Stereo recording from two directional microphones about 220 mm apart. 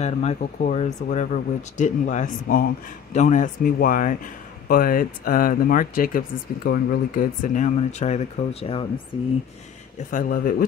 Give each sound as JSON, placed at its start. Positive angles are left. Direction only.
{"t": 0.0, "sound": "speech", "side_deg": 30}
{"t": 10.1, "sound": "speech", "side_deg": 40}